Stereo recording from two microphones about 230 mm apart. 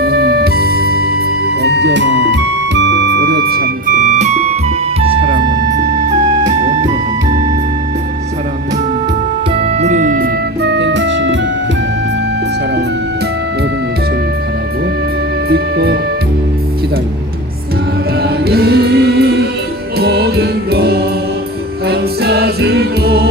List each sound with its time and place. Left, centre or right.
0.0 s music: right
9.7 s music: right
15.4 s music: right
18.2 s music: right